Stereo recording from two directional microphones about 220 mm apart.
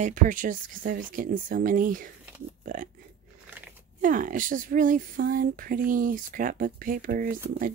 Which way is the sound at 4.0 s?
35° right (ahead or behind).